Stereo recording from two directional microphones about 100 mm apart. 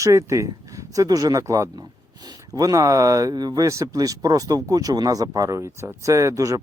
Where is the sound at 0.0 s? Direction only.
30° right (ahead or behind).